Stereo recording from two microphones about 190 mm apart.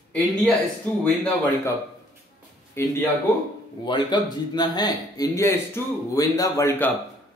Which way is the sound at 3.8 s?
25° left (ahead or behind).